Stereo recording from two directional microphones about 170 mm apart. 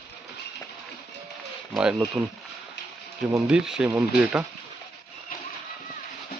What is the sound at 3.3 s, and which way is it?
Speech, 5° right (ahead or behind).